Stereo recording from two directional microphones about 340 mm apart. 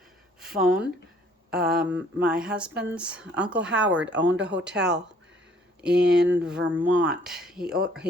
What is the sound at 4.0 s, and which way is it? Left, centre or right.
Speech, right.